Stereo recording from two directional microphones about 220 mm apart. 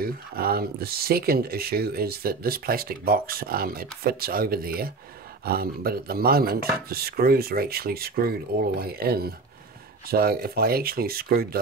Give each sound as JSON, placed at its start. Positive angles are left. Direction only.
{"t": 0.0, "sound": "speech", "side_deg": -45}